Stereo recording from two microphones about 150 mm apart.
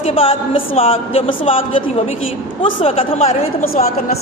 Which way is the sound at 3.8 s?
55° left (ahead or behind).